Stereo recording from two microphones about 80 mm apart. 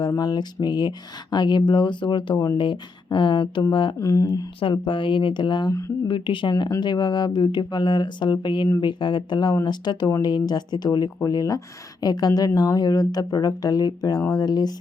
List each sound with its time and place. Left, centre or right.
0.2 s speech: left
3.9 s speech: left
4.6 s speech: left
6.1 s speech: left
6.7 s speech: left
8.8 s speech: left